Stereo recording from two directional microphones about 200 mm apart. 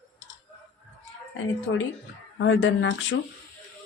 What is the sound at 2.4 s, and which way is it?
Speech, 65° left (ahead or behind).